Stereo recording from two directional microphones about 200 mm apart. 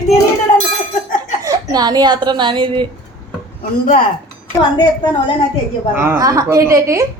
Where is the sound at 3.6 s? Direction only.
45° left (ahead or behind).